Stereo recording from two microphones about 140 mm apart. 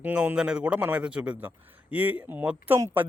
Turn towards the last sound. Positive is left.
turn(degrees=-20)  # may be behind; listen again after turning